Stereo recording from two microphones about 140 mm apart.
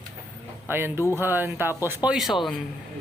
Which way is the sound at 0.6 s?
15° right (ahead or behind).